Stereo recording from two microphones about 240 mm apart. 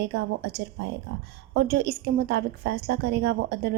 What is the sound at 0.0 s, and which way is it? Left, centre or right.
A woman's voice, right.